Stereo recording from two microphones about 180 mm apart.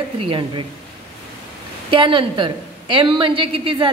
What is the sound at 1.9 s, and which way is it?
A woman's voice, 30° right (ahead or behind).